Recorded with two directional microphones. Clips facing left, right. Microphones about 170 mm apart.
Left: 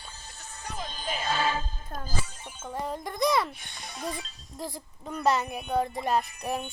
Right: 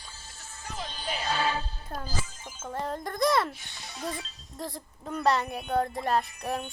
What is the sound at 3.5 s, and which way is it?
Speech, 60° left (ahead or behind).